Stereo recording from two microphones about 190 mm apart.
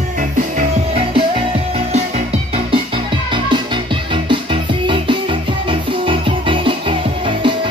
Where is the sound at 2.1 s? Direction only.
30° right (ahead or behind).